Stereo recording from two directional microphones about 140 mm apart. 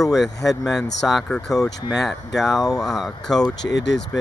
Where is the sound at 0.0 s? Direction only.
Centre (ahead or behind).